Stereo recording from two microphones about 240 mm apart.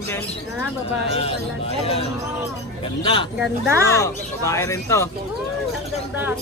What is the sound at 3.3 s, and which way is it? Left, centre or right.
Speech, centre.